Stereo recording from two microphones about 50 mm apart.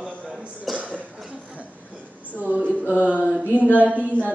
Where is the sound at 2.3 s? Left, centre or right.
Right.